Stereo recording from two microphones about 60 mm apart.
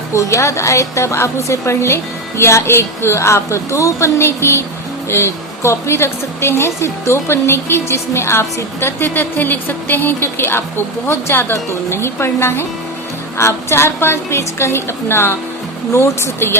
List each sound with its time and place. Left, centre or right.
0.1 s a woman's voice: left